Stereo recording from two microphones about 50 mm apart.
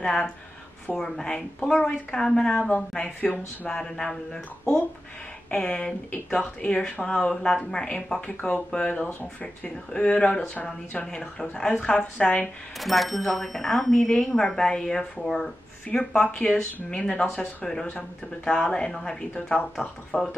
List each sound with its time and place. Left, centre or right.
0.0 s speech: centre
12.7 s speech: centre